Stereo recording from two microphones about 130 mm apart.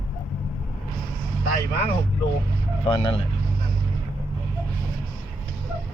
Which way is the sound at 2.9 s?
40° left (ahead or behind).